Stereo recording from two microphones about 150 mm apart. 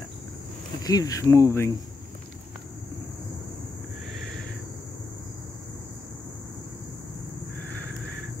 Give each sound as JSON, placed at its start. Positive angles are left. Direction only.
{"t": 0.8, "sound": "cricket", "side_deg": 25}